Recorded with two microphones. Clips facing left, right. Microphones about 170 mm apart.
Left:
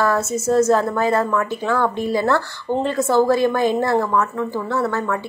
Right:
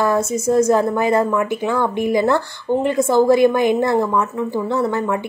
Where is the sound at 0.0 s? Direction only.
15° right (ahead or behind).